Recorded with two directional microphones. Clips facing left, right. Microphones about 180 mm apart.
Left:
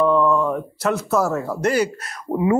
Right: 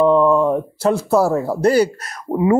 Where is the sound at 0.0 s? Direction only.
30° right (ahead or behind).